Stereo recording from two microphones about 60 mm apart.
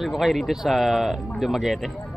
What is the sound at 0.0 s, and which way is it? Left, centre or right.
Speech, centre.